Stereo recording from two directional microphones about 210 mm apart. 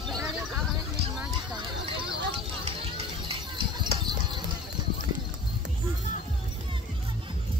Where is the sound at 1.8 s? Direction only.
25° right (ahead or behind).